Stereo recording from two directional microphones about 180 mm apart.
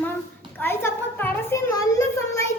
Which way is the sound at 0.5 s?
10° left (ahead or behind).